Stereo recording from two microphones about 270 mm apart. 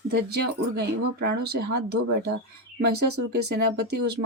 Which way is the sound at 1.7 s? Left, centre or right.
Right.